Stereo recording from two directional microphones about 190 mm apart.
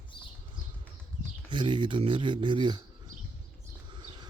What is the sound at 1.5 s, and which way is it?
Speech, 25° right (ahead or behind).